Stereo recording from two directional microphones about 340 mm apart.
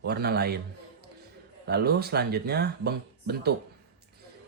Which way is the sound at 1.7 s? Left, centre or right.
Right.